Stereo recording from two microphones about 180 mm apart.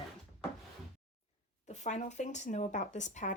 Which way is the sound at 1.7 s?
40° left (ahead or behind).